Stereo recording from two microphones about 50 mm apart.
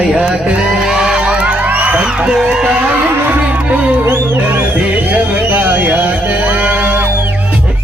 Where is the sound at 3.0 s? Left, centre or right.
Right.